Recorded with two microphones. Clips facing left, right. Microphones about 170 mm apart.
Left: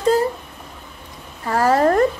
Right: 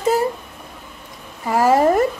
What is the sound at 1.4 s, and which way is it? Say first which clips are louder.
Speech: right 1 dB; 10° right (ahead or behind).